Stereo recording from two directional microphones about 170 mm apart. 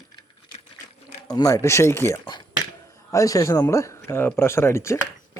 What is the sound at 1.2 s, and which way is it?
Speech, 20° left (ahead or behind).